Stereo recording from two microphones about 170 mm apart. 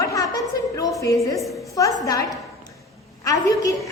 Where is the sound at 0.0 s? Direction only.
20° left (ahead or behind).